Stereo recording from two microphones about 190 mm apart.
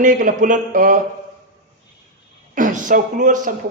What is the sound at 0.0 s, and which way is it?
Speech, 45° right (ahead or behind).